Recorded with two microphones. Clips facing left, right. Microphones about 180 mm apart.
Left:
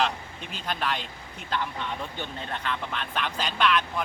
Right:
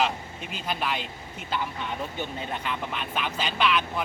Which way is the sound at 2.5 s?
10° right (ahead or behind).